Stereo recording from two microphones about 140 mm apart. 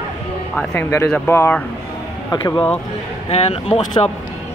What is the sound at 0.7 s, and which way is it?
Speech, 20° left (ahead or behind).